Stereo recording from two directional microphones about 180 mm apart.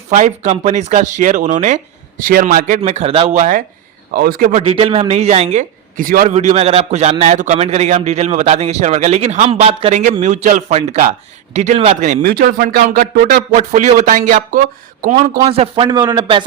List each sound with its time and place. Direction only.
0.1 s speech: 45° right (ahead or behind)
4.1 s speech: 55° right (ahead or behind)
4.6 s a man's voice: 35° right (ahead or behind)
12.2 s speech: 60° right (ahead or behind)
15.4 s a man's voice: 35° right (ahead or behind)